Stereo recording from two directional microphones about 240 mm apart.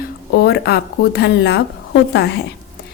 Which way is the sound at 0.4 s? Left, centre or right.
Left.